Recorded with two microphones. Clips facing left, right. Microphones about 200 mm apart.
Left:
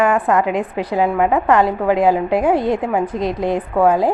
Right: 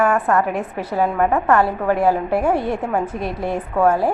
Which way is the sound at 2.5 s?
10° right (ahead or behind).